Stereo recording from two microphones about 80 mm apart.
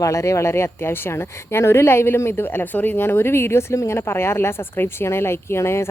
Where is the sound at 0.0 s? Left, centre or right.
Left.